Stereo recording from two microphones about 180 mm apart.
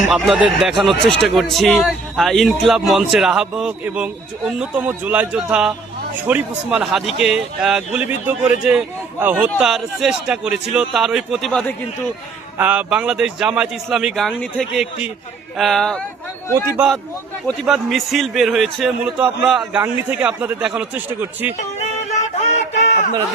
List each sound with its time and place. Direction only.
0.3 s speech: 5° right (ahead or behind)
12.5 s speech: 10° right (ahead or behind)
16.6 s a man's voice: 10° right (ahead or behind)
21.8 s music: 40° left (ahead or behind)